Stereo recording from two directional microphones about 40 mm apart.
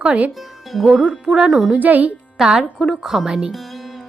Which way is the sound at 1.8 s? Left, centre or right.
Right.